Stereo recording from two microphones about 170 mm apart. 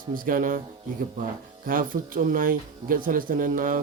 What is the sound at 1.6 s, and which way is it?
A man's voice, 55° right (ahead or behind).